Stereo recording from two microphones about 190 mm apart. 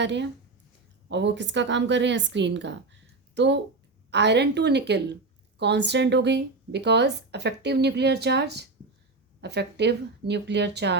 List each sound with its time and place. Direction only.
0.0 s a woman's voice: 70° right (ahead or behind)